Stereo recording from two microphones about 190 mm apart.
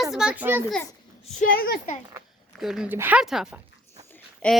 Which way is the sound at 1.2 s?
45° left (ahead or behind).